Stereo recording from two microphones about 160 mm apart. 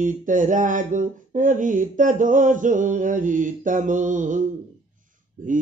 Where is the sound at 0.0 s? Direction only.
55° right (ahead or behind).